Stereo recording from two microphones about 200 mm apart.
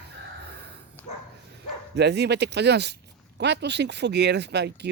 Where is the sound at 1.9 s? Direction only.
60° right (ahead or behind).